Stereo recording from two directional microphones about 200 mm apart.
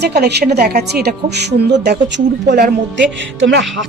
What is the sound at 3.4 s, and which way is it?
Speech, 60° right (ahead or behind).